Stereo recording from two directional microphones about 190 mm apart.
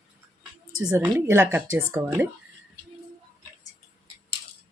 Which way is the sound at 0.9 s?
10° right (ahead or behind).